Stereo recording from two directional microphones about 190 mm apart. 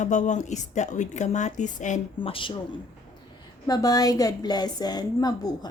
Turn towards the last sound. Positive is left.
turn(degrees=20)  # may be behind; listen again after turning